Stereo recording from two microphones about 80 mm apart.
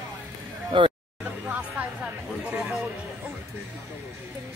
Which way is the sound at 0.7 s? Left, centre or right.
Right.